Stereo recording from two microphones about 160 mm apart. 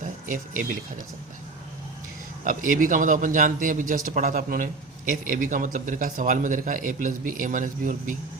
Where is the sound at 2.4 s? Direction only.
55° right (ahead or behind).